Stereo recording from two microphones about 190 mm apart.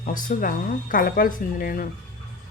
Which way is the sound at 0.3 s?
45° left (ahead or behind).